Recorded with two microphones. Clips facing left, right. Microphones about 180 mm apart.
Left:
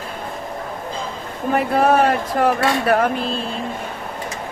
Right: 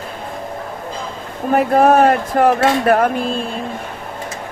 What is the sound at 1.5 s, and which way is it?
Dishes, 45° right (ahead or behind).